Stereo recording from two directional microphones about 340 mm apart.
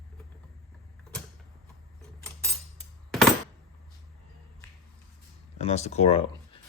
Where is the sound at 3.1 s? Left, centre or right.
Centre.